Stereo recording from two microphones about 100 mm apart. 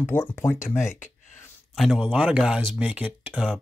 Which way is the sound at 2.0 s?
10° right (ahead or behind).